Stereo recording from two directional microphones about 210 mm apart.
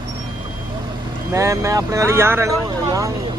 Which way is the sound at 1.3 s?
15° right (ahead or behind).